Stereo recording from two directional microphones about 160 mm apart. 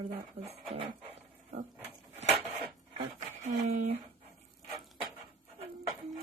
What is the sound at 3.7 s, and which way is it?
Speech, 40° right (ahead or behind).